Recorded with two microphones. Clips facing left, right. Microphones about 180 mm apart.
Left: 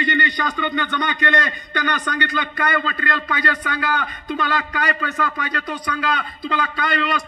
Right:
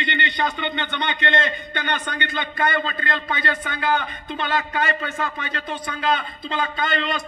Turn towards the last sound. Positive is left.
turn(degrees=-25)  # may be behind; listen again after turning